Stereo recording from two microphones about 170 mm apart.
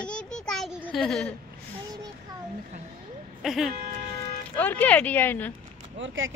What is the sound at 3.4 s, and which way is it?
Speech, centre (ahead or behind).